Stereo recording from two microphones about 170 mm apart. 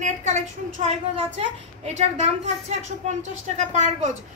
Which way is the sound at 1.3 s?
40° right (ahead or behind).